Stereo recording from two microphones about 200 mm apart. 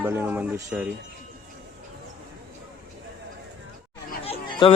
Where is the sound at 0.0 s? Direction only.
10° right (ahead or behind).